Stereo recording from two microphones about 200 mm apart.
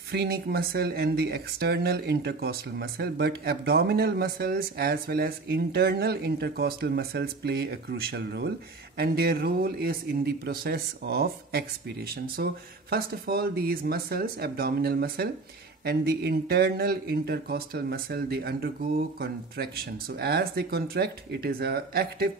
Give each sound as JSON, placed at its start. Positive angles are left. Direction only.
{"t": 0.1, "sound": "speech", "side_deg": -55}